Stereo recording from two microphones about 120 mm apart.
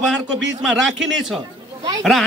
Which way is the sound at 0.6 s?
5° right (ahead or behind).